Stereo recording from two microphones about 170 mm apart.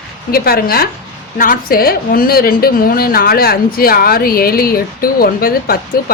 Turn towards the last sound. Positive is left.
turn(degrees=60)  # may be behind; listen again after turning